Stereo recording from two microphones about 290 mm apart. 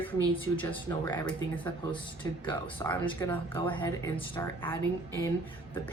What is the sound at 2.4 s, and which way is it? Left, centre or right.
A woman's voice, centre.